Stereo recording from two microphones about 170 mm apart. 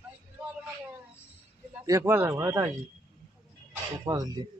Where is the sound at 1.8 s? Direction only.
15° right (ahead or behind).